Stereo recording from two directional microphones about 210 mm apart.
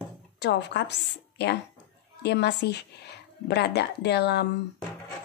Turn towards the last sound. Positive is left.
turn(degrees=55)  # may be behind; listen again after turning